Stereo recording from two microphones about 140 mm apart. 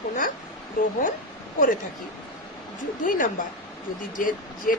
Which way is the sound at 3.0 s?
75° left (ahead or behind).